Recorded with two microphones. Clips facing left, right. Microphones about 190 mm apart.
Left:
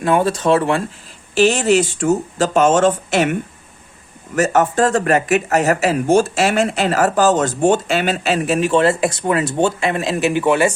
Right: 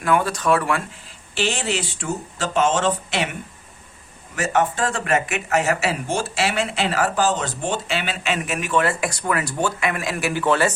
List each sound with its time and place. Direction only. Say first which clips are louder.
0.0 s speech: left 5 dB; 25° left (ahead or behind)
1.4 s speech: left 10 dB; 45° left (ahead or behind)
4.4 s speech: left 6 dB; 45° left (ahead or behind); by 10.8 s 15° left (ahead or behind)